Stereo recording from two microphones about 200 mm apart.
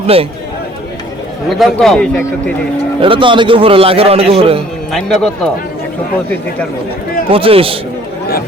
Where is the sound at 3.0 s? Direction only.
25° right (ahead or behind).